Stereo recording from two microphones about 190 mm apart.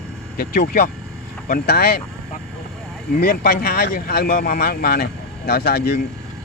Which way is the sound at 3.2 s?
55° left (ahead or behind).